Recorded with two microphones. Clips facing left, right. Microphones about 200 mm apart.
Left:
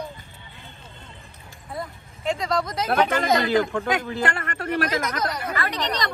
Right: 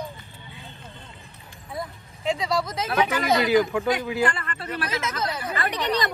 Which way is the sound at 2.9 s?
55° left (ahead or behind).